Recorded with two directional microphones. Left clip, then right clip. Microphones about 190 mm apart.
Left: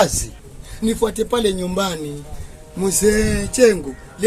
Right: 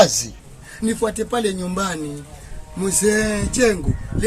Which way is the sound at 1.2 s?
5° left (ahead or behind).